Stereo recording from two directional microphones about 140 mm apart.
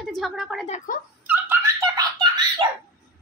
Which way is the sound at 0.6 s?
65° left (ahead or behind).